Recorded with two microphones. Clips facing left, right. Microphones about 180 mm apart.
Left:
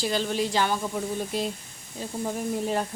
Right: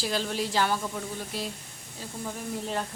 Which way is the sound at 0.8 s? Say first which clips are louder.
Left 5 dB; 20° left (ahead or behind).